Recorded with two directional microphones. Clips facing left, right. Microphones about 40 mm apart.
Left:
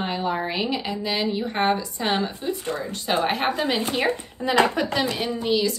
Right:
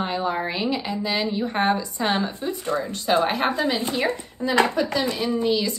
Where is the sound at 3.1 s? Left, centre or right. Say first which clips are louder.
Right 2 dB; left.